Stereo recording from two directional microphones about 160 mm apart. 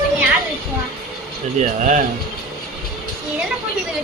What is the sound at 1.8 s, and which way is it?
Speech, 50° right (ahead or behind).